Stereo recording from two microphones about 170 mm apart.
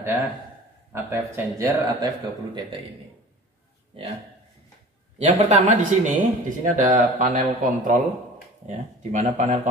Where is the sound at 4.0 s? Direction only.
35° right (ahead or behind).